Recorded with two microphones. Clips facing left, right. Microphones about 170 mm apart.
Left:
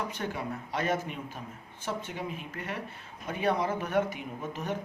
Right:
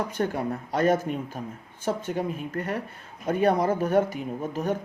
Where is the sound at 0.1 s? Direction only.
45° right (ahead or behind).